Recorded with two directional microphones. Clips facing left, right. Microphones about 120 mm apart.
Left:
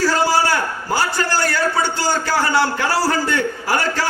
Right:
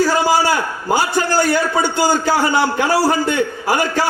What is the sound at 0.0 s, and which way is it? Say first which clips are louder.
A man's voice: right 2 dB; 15° right (ahead or behind).